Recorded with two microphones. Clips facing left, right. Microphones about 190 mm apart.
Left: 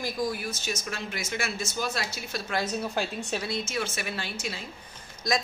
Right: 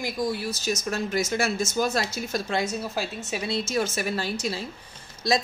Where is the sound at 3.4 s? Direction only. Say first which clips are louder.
Right 5 dB; 35° right (ahead or behind).